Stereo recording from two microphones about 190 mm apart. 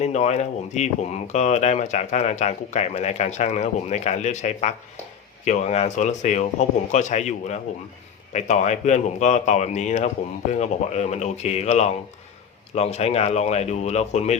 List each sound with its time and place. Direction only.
0.0 s speech: 35° left (ahead or behind)